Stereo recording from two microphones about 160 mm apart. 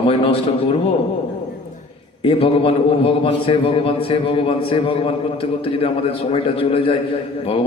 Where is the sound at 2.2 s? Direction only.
35° left (ahead or behind).